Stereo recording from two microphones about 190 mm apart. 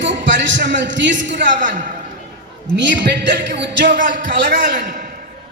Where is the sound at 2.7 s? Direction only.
70° right (ahead or behind).